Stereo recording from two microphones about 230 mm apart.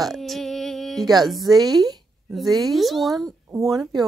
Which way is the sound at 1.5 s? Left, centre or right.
Centre.